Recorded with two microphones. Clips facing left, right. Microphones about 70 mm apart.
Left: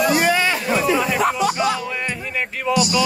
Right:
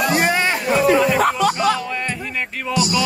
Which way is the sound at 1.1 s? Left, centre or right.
Right.